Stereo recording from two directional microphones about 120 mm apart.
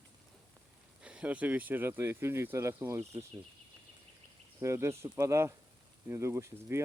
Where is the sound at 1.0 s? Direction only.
10° right (ahead or behind).